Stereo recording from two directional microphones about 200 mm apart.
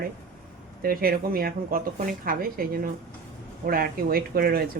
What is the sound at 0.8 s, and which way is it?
Speech, 45° right (ahead or behind).